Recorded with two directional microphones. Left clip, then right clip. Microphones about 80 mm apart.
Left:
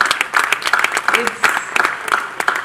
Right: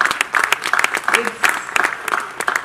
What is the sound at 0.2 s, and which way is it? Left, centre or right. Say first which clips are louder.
Applause: left 1 dB; right.